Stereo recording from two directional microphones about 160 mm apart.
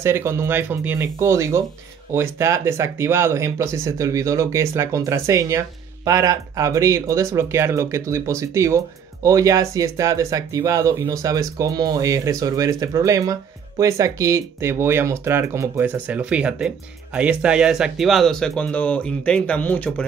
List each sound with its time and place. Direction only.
0.0 s speech: 15° right (ahead or behind); by 20.1 s 10° left (ahead or behind)